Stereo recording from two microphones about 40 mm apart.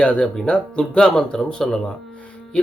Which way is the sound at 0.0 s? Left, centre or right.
Left.